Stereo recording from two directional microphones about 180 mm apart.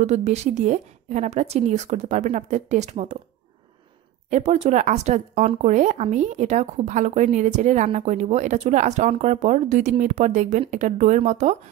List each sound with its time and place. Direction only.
0.0 s speech: 40° right (ahead or behind)
4.3 s speech: 40° right (ahead or behind)